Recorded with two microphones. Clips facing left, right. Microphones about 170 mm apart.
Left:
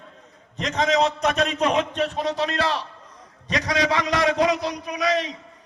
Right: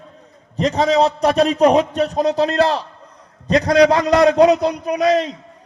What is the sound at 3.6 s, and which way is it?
Speech, 55° right (ahead or behind).